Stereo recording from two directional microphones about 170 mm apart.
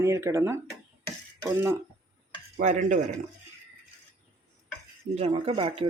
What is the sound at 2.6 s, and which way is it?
Speech, 45° right (ahead or behind).